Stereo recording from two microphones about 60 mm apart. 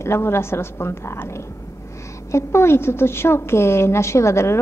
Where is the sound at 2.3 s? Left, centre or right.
Left.